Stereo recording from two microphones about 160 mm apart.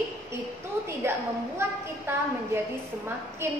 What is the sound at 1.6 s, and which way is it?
A woman's voice, 15° right (ahead or behind).